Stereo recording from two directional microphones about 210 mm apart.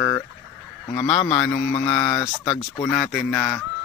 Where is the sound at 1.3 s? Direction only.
5° left (ahead or behind).